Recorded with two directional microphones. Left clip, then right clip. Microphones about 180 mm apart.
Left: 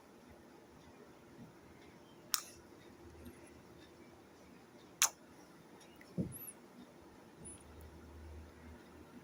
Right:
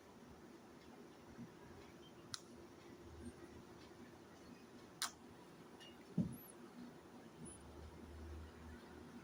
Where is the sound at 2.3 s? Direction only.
30° left (ahead or behind).